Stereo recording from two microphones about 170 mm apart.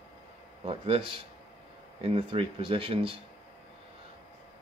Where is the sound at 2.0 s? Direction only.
35° right (ahead or behind).